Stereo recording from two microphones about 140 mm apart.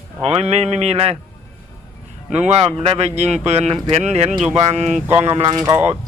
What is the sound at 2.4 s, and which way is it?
A man's voice, 50° right (ahead or behind).